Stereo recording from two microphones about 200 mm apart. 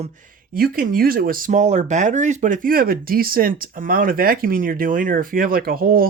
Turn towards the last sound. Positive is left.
turn(degrees=-45)  # may be behind; listen again after turning